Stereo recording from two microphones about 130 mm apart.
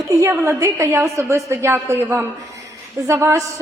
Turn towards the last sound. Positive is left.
turn(degrees=-20)  # may be behind; listen again after turning